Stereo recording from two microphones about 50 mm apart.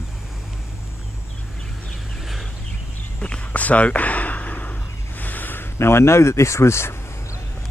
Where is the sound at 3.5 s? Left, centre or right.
Left.